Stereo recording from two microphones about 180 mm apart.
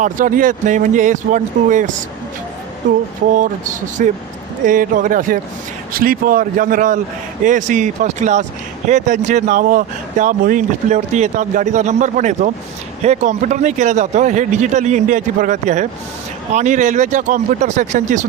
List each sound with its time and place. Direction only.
0.0 s speech: 50° right (ahead or behind)